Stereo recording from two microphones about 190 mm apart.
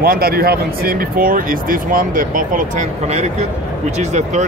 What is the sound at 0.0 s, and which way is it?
Speech, 50° right (ahead or behind).